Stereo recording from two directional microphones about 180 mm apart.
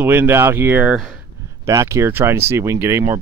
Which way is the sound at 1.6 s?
15° right (ahead or behind).